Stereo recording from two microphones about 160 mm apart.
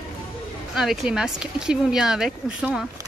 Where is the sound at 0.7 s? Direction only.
Centre (ahead or behind).